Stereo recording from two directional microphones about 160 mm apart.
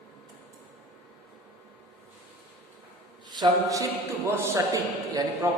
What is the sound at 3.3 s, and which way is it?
A man's voice, 25° right (ahead or behind).